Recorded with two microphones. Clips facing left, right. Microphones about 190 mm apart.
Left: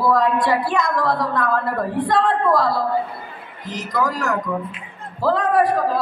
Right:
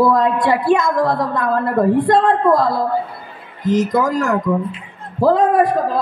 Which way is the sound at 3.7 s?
45° right (ahead or behind).